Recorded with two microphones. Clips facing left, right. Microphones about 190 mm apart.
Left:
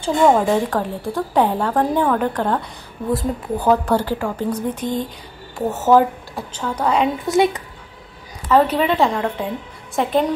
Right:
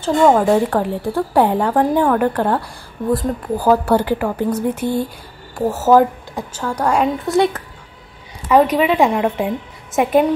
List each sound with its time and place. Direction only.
0.0 s a woman's voice: centre (ahead or behind)
3.1 s speech: 25° left (ahead or behind)
3.6 s a woman's voice: 5° right (ahead or behind)
8.5 s a woman's voice: 10° right (ahead or behind)